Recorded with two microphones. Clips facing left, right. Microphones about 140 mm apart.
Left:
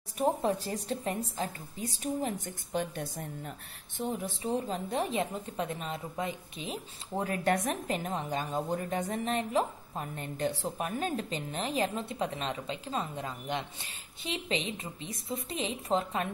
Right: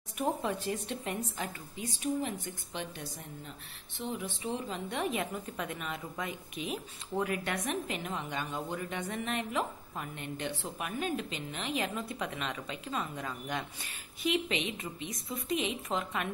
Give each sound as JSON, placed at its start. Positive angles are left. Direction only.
{"t": 0.2, "sound": "a woman's voice", "side_deg": 35}